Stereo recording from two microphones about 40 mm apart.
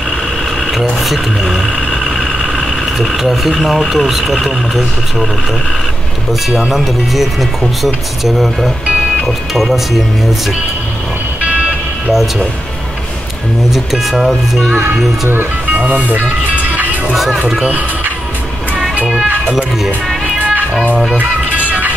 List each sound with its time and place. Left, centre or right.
0.7 s speech: centre
6.7 s speech: centre
12.1 s speech: centre
13.7 s speech: centre
15.7 s speech: right
21.1 s music: right